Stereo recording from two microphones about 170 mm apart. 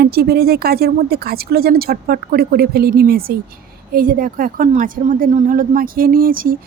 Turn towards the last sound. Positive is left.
turn(degrees=-55)  # may be behind; listen again after turning